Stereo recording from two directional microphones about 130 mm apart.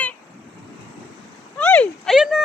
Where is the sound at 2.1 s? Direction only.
Centre (ahead or behind).